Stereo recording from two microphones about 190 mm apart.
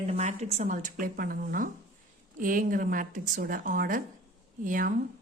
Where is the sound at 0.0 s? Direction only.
35° right (ahead or behind).